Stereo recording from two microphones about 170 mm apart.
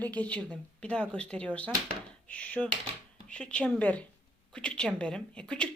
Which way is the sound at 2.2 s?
10° left (ahead or behind).